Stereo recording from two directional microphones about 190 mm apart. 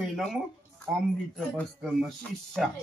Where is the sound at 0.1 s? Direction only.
Centre (ahead or behind).